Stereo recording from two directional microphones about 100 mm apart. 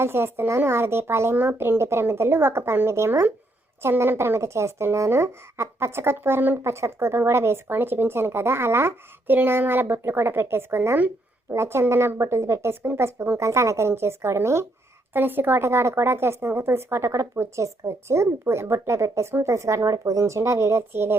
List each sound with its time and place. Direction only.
0.0 s speech: 25° right (ahead or behind)